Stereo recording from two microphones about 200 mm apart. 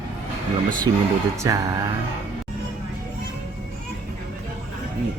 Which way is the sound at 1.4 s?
15° right (ahead or behind).